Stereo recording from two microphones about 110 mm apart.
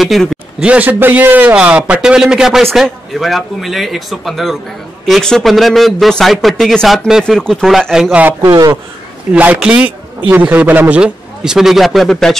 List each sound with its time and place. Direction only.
0.0 s a man's voice: centre (ahead or behind)
0.6 s a man's voice: 10° right (ahead or behind); by 7.1 s 5° left (ahead or behind)
7.1 s a man's voice: 5° right (ahead or behind)
8.5 s a man's voice: 35° right (ahead or behind)
9.3 s a man's voice: 10° right (ahead or behind); by 12.4 s 5° left (ahead or behind)